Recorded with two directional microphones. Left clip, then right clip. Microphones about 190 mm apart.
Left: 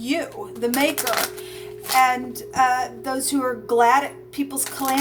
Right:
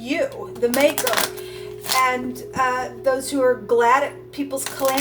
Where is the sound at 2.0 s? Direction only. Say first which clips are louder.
Left 1 dB; 45° left (ahead or behind).